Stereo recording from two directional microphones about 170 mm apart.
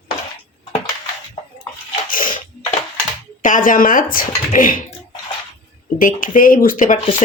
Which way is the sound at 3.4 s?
50° left (ahead or behind).